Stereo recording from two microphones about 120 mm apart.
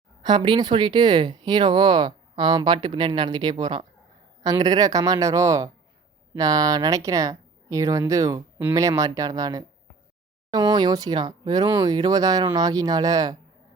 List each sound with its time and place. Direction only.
0.2 s speech: 40° right (ahead or behind)
4.4 s speech: 30° right (ahead or behind)